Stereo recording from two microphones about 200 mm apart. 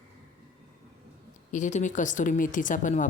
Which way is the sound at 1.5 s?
40° left (ahead or behind).